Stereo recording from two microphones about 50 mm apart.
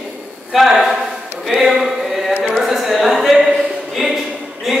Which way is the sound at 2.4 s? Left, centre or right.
Centre.